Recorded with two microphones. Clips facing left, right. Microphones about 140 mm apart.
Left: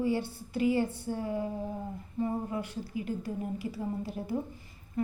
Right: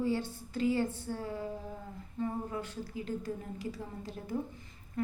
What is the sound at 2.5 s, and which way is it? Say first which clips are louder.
A woman's voice: left 3 dB; 15° left (ahead or behind).